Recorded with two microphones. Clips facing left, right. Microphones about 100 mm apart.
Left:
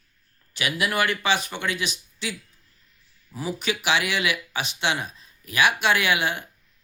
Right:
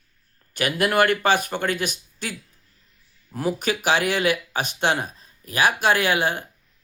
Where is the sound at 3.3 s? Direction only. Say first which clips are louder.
Right 4 dB; 50° right (ahead or behind).